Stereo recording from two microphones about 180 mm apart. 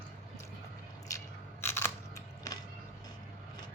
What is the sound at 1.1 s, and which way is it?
Scissors, 15° left (ahead or behind).